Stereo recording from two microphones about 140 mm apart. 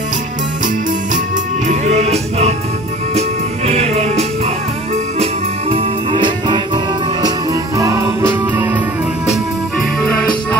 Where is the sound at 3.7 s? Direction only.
50° right (ahead or behind).